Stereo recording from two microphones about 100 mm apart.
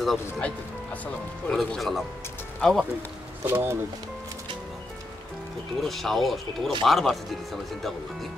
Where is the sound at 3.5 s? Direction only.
25° right (ahead or behind).